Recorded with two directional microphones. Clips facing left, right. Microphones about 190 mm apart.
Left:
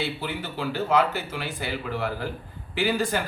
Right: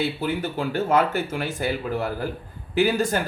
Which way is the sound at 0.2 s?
45° right (ahead or behind).